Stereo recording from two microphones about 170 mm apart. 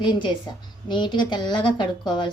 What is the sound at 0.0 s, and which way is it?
Speech, 25° left (ahead or behind).